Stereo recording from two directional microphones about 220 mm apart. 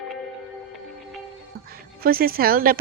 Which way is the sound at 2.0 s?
40° right (ahead or behind).